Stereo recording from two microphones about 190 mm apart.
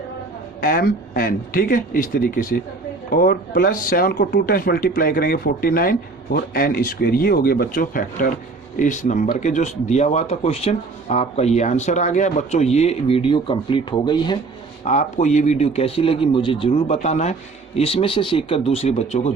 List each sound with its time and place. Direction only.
0.6 s speech: 50° left (ahead or behind); by 14.3 s 25° left (ahead or behind)
14.8 s speech: 35° left (ahead or behind)